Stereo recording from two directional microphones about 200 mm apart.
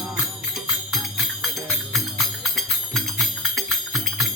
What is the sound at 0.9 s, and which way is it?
Music, centre (ahead or behind).